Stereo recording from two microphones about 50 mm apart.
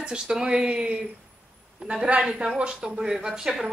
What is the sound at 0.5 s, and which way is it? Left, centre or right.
A woman's voice, right.